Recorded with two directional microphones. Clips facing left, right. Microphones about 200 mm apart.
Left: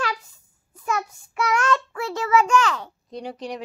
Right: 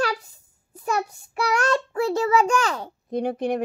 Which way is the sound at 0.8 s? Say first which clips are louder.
Right 2 dB; 35° right (ahead or behind).